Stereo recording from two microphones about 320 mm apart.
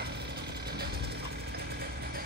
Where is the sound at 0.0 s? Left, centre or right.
Right.